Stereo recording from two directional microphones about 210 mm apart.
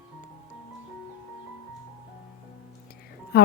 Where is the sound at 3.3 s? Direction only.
50° left (ahead or behind).